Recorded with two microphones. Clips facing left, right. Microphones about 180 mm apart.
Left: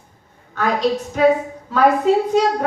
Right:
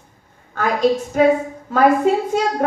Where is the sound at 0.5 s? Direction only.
50° right (ahead or behind).